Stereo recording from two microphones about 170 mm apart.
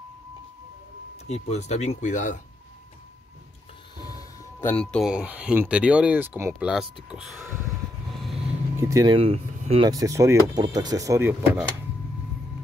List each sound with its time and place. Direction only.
1.2 s speech: 40° left (ahead or behind)
4.1 s music: 15° left (ahead or behind)
5.1 s speech: 10° right (ahead or behind)
8.7 s speech: 20° right (ahead or behind); by 9.8 s 35° right (ahead or behind)
9.8 s speech: 20° right (ahead or behind)